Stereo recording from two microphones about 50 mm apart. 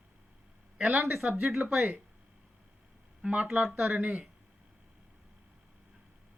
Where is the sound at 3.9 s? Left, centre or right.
Right.